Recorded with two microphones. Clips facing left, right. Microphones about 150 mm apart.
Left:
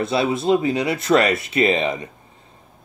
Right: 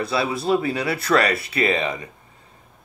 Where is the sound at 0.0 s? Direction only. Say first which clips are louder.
Left 3 dB; 25° left (ahead or behind).